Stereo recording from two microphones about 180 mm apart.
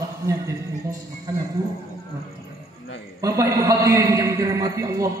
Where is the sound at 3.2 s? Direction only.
20° right (ahead or behind).